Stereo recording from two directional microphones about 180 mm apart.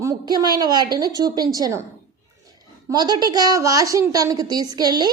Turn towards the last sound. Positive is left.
turn(degrees=-20)  # may be behind; listen again after turning